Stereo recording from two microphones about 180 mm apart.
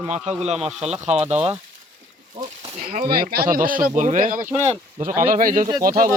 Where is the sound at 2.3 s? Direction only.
25° right (ahead or behind).